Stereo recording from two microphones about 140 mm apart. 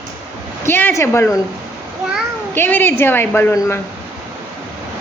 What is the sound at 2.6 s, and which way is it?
A woman's voice, 15° left (ahead or behind).